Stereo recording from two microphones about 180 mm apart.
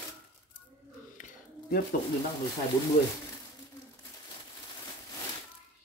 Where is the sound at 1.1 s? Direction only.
50° left (ahead or behind).